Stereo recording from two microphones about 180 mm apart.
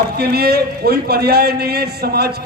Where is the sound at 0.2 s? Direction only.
60° right (ahead or behind).